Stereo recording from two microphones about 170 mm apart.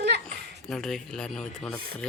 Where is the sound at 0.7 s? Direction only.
Centre (ahead or behind).